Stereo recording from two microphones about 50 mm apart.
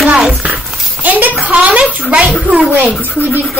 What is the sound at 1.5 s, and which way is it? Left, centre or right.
Speech, right.